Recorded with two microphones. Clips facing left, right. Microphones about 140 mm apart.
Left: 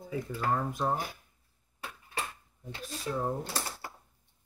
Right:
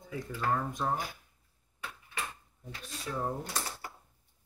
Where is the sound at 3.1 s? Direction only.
25° left (ahead or behind).